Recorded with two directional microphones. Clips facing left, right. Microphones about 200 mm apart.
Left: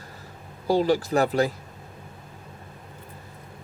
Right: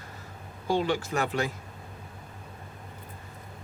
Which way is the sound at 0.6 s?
35° left (ahead or behind).